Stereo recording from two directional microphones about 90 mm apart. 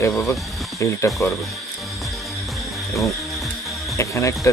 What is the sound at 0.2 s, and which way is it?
Speech, 35° left (ahead or behind).